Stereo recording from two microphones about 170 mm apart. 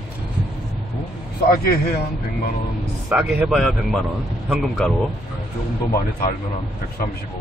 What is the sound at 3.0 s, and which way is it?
A man's voice, 5° right (ahead or behind).